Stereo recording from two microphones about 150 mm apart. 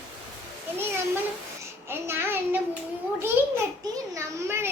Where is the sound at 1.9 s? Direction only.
15° right (ahead or behind).